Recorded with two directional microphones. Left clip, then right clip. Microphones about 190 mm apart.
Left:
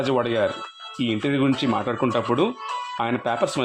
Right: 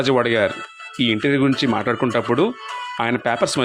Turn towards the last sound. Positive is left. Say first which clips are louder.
# right 4 dB
turn(degrees=-20)  # may be behind; listen again after turning